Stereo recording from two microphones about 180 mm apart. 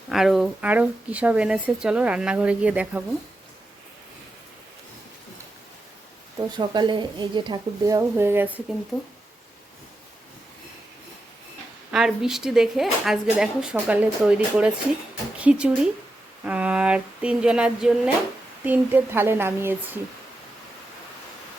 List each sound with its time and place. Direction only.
0.1 s a woman's voice: centre (ahead or behind)
6.4 s speech: 25° right (ahead or behind)
11.9 s a woman's voice: 5° right (ahead or behind)